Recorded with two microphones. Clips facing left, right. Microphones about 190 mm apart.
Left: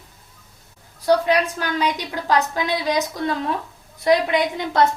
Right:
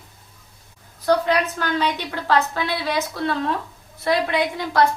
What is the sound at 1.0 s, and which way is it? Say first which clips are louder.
A woman's voice: left 1 dB; 10° left (ahead or behind).